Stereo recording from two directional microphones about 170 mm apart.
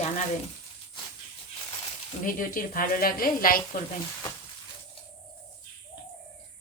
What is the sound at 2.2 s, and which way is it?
Speech, 55° left (ahead or behind).